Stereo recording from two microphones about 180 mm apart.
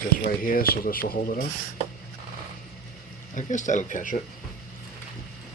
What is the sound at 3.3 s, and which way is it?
Speech, 45° left (ahead or behind).